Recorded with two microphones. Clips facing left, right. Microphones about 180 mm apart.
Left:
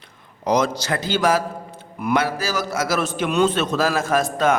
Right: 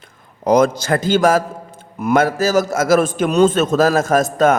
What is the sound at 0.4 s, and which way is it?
A man's voice, 50° right (ahead or behind).